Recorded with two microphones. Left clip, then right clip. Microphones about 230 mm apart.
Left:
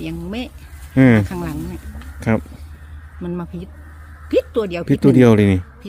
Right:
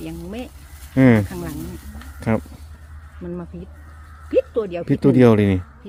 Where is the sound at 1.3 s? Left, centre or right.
Left.